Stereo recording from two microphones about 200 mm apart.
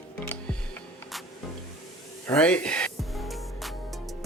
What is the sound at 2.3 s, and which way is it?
Music, 5° left (ahead or behind).